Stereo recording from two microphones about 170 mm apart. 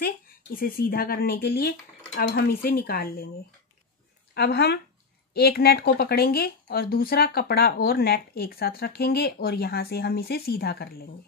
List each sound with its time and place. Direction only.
0.0 s speech: 60° left (ahead or behind)
4.3 s speech: 70° left (ahead or behind)